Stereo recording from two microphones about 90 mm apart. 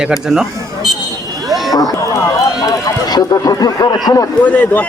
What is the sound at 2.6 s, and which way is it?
Speech, 40° left (ahead or behind).